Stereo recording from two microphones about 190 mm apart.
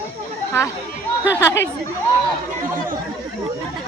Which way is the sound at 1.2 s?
15° left (ahead or behind).